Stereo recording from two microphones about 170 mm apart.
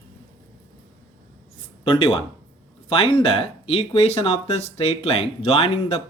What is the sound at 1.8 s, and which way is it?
Speech, 35° left (ahead or behind).